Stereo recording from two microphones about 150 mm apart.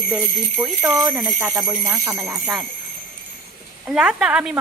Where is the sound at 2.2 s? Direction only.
15° right (ahead or behind).